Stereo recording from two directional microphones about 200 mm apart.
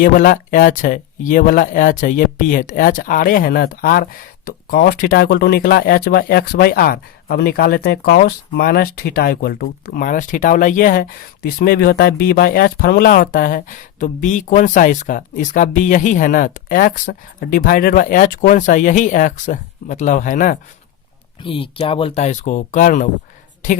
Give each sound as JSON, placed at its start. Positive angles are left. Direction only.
{"t": 0.0, "sound": "speech", "side_deg": 45}
{"t": 21.4, "sound": "speech", "side_deg": 25}